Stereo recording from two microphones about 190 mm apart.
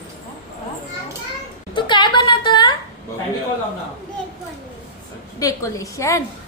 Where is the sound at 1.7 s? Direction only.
25° left (ahead or behind).